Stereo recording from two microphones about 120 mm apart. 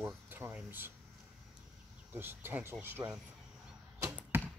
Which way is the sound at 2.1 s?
15° right (ahead or behind).